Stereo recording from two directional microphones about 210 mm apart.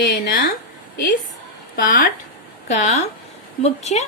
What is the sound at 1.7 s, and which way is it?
Speech, 40° left (ahead or behind).